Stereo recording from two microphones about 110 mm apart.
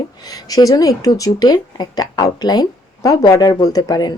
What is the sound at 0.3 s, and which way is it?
Speech, 35° left (ahead or behind).